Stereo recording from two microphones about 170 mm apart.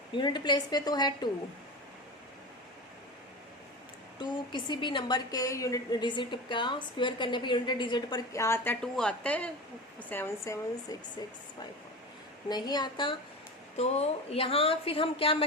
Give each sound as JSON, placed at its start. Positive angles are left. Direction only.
{"t": 0.1, "sound": "a woman's voice", "side_deg": 25}
{"t": 4.2, "sound": "a woman's voice", "side_deg": 25}
{"t": 12.5, "sound": "a woman's voice", "side_deg": 25}
{"t": 13.7, "sound": "a woman's voice", "side_deg": 40}